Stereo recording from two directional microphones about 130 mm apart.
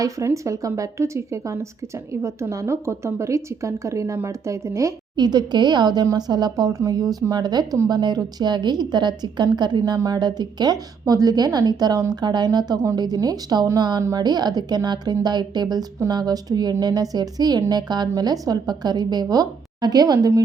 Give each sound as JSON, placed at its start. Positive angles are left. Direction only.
{"t": 0.0, "sound": "a woman's voice", "side_deg": -25}